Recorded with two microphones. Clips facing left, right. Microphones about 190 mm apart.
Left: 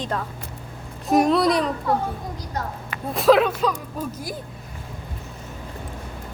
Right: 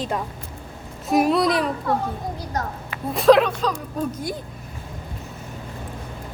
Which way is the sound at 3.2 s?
5° left (ahead or behind).